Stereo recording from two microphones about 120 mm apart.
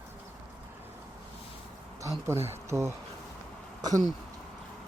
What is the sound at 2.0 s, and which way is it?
Speech, 25° right (ahead or behind).